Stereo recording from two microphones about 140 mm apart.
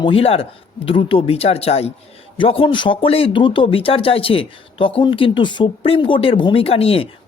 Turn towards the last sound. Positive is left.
turn(degrees=45)  # may be behind; listen again after turning